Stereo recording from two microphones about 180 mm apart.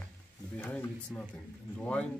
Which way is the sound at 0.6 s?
5° left (ahead or behind).